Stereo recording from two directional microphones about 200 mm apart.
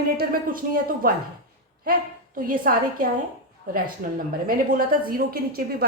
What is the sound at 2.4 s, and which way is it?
A woman's voice, 45° right (ahead or behind).